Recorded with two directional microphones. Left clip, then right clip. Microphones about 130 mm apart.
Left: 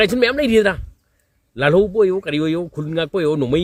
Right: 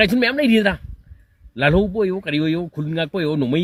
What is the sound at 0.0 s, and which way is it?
Speech, 35° left (ahead or behind).